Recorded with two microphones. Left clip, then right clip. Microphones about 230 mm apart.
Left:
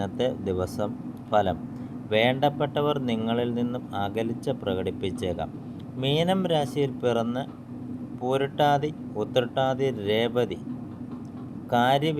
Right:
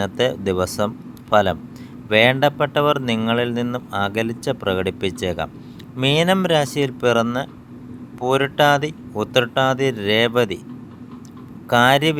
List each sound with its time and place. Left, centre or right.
0.0 s speech: right
11.7 s speech: right